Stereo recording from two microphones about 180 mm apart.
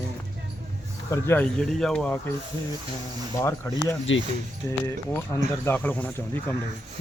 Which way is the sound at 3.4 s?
15° left (ahead or behind).